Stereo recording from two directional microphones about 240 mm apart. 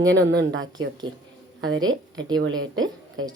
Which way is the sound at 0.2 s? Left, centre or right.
Right.